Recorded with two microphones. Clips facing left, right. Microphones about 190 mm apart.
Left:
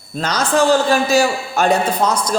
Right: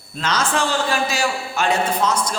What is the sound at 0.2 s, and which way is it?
A man's voice, 40° left (ahead or behind).